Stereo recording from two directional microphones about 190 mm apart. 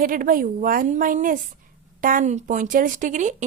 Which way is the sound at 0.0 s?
45° right (ahead or behind).